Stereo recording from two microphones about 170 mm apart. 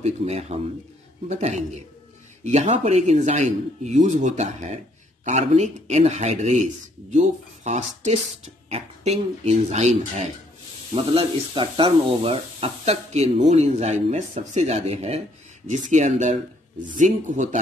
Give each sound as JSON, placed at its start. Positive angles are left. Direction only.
{"t": 0.0, "sound": "speech", "side_deg": -40}
{"t": 2.4, "sound": "a man's voice", "side_deg": -45}